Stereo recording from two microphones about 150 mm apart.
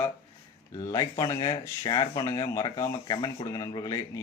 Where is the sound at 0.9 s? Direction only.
25° left (ahead or behind).